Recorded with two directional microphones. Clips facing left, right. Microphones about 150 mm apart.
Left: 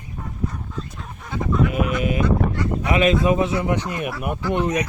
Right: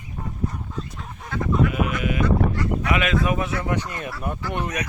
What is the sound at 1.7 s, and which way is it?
Speech, 35° left (ahead or behind).